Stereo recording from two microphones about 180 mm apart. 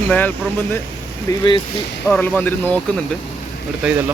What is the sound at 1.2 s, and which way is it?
Speech, 25° left (ahead or behind).